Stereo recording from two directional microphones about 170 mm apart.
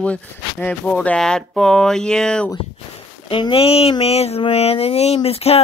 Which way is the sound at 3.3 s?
30° left (ahead or behind).